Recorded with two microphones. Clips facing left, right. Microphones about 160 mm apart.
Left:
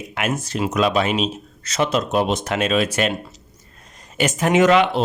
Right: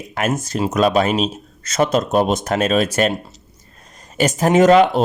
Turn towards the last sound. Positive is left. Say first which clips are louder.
# right 4 dB
turn(degrees=-40)  # may be behind; listen again after turning